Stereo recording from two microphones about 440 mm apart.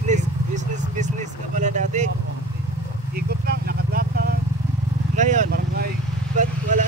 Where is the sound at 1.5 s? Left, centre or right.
Centre.